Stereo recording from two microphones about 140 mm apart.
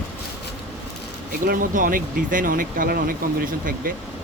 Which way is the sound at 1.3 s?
80° right.